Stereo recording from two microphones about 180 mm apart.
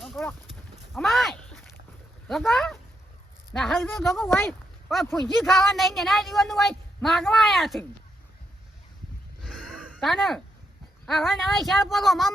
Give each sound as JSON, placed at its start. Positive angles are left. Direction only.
{"t": 0.0, "sound": "speech", "side_deg": 0}
{"t": 0.9, "sound": "a sound", "side_deg": 0}
{"t": 2.2, "sound": "speech", "side_deg": 0}
{"t": 4.3, "sound": "speech", "side_deg": 15}
{"t": 5.1, "sound": "speech", "side_deg": 0}
{"t": 9.4, "sound": "a sound", "side_deg": 0}
{"t": 11.0, "sound": "speech", "side_deg": 0}